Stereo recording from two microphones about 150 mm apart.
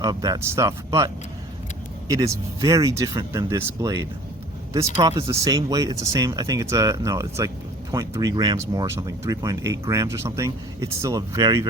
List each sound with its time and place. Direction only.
0.0 s speech: 25° right (ahead or behind)